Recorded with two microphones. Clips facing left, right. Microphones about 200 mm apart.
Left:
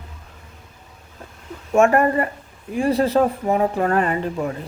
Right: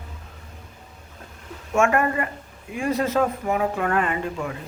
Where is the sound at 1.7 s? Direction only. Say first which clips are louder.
Left 5 dB; 35° left (ahead or behind).